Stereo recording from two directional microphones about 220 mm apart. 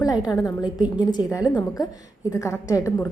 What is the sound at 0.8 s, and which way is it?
A woman's voice, 20° left (ahead or behind).